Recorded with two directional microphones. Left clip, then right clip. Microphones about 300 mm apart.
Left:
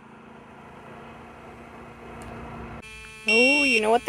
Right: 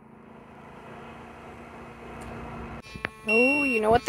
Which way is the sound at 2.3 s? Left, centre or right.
Centre.